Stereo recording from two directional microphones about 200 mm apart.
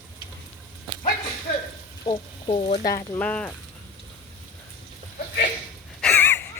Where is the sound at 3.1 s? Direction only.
5° left (ahead or behind).